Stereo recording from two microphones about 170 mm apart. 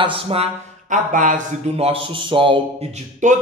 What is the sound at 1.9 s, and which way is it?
Speech, 30° right (ahead or behind).